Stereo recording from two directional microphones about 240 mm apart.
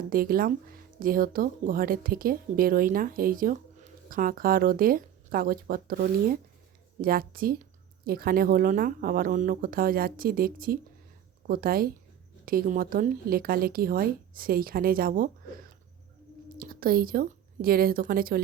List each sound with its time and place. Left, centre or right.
0.1 s speech: right